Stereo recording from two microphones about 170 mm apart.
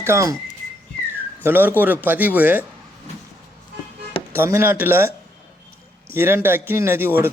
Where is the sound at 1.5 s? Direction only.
10° right (ahead or behind).